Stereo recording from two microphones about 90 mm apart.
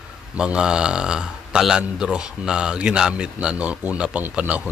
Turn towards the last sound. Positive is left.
turn(degrees=-15)  # may be behind; listen again after turning